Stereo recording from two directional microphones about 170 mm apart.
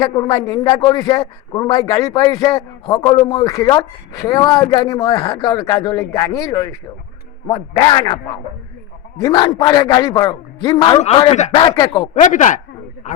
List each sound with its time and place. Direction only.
0.0 s a man's voice: 25° left (ahead or behind)
11.3 s speech: 45° left (ahead or behind)
11.6 s a man's voice: 25° left (ahead or behind)
12.2 s speech: 50° left (ahead or behind)
13.0 s a sound: 45° left (ahead or behind)